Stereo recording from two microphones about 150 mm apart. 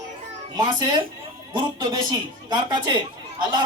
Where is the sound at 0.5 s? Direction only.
25° right (ahead or behind).